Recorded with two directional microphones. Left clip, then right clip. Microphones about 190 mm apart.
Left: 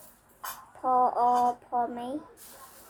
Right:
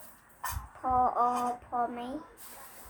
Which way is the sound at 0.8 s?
15° left (ahead or behind).